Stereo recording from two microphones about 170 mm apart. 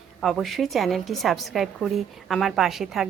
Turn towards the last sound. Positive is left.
turn(degrees=0)  # may be behind; listen again after turning